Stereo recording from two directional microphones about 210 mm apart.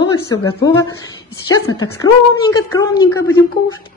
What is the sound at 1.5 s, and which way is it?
A woman's voice, 15° left (ahead or behind).